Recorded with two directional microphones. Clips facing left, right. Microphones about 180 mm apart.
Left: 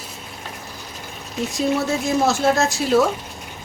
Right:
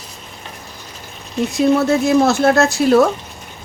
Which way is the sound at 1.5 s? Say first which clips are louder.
Right 7 dB; 65° right (ahead or behind).